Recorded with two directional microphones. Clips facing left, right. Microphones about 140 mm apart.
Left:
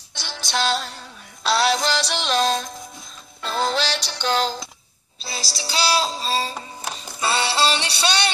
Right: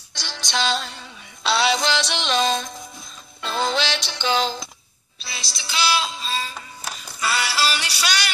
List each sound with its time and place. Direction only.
0.3 s music: 5° left (ahead or behind)
5.2 s music: 35° left (ahead or behind)